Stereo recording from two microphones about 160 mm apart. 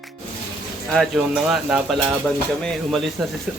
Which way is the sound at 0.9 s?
Centre (ahead or behind).